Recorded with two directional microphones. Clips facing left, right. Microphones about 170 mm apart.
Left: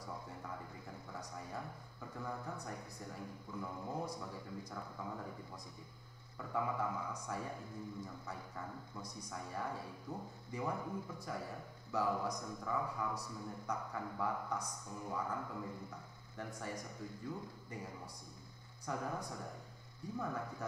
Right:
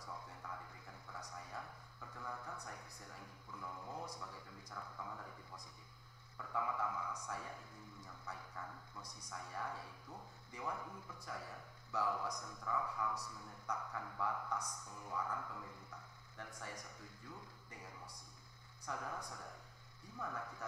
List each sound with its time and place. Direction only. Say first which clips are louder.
0.0 s a sound: left 4 dB; 25° left (ahead or behind)
6.3 s a man's voice: left 3 dB; 25° left (ahead or behind)
18.9 s a man's voice: left 5 dB; 25° left (ahead or behind)